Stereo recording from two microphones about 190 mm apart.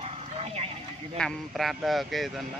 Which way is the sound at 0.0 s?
30° right (ahead or behind).